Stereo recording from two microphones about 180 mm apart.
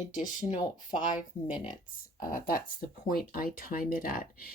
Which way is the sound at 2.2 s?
50° left (ahead or behind).